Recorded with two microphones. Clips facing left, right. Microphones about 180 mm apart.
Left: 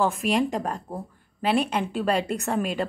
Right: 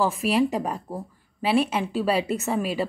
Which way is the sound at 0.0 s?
Centre (ahead or behind).